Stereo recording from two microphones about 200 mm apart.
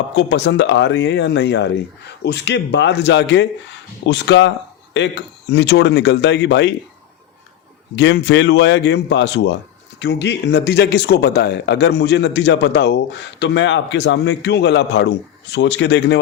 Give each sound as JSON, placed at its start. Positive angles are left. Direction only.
{"t": 0.2, "sound": "speech", "side_deg": 60}
{"t": 7.9, "sound": "speech", "side_deg": 60}